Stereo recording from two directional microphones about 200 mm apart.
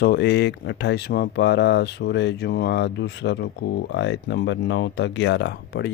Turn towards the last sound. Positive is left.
turn(degrees=55)  # may be behind; listen again after turning